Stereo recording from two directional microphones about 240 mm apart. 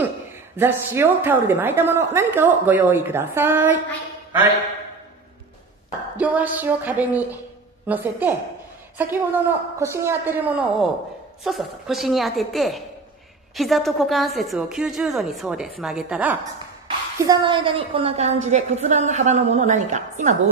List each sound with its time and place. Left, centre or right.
0.6 s a woman's voice: centre
6.1 s a woman's voice: centre
16.8 s a woman's voice: centre